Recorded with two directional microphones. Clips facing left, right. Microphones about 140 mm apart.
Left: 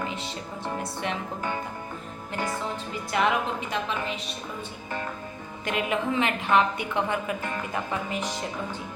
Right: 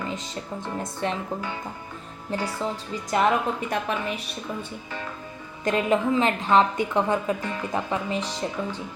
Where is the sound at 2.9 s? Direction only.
40° right (ahead or behind).